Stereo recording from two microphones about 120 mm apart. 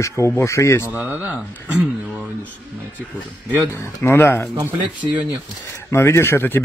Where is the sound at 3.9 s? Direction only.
20° left (ahead or behind).